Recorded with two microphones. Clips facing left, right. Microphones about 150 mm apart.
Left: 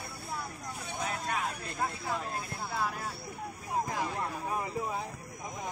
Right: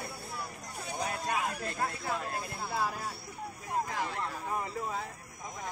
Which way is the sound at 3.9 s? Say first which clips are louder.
Left 1 dB; 10° left (ahead or behind).